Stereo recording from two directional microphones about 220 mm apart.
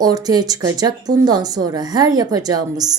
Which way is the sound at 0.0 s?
15° right (ahead or behind).